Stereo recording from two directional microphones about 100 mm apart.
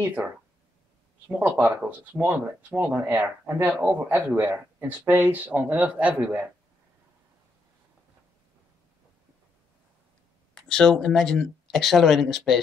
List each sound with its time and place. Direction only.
0.0 s speech: 15° right (ahead or behind)
1.3 s speech: 15° right (ahead or behind)
10.5 s speech: 5° left (ahead or behind)